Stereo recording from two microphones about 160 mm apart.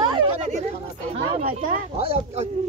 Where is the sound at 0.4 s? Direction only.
45° right (ahead or behind).